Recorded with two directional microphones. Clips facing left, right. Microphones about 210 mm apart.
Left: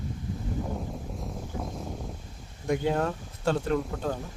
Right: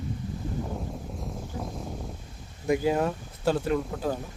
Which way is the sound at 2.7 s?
5° right (ahead or behind).